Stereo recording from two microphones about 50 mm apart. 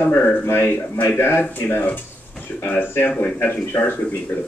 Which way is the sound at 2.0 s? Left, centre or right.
Left.